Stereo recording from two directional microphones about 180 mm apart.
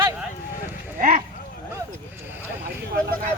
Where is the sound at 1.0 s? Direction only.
50° right (ahead or behind).